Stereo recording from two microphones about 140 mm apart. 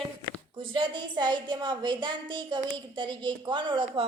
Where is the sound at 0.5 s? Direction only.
35° right (ahead or behind).